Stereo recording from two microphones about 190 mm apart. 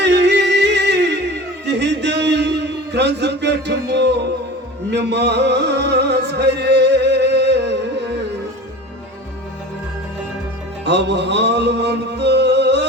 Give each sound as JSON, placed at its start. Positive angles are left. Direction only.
{"t": 0.0, "sound": "music", "side_deg": -65}
{"t": 1.6, "sound": "a sound", "side_deg": -65}
{"t": 4.9, "sound": "music", "side_deg": -65}
{"t": 10.8, "sound": "music", "side_deg": -65}